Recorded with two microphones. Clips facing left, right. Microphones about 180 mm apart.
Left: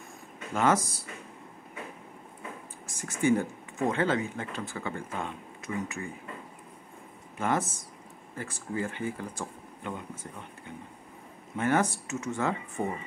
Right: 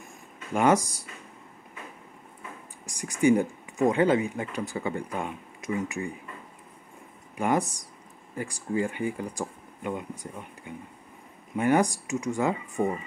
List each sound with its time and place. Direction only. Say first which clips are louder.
0.6 s speech: right 3 dB; 15° right (ahead or behind)
2.9 s speech: right 4 dB; 15° right (ahead or behind)
7.3 s speech: right 3 dB; 15° right (ahead or behind)